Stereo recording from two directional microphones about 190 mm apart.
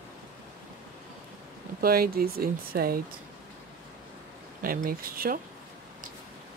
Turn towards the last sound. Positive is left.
turn(degrees=-50)  # may be behind; listen again after turning